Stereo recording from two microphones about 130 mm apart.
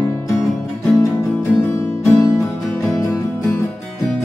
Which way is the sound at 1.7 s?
20° left (ahead or behind).